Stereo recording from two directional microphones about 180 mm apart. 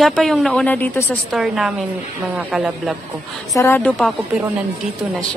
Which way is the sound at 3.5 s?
15° left (ahead or behind).